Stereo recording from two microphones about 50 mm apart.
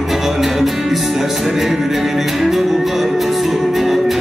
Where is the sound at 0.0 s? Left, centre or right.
Centre.